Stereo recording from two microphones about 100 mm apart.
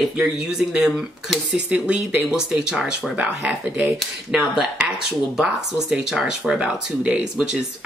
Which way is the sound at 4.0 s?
5° right (ahead or behind).